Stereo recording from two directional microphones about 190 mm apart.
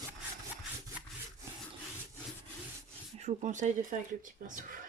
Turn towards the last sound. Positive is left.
turn(degrees=-40)  # may be behind; listen again after turning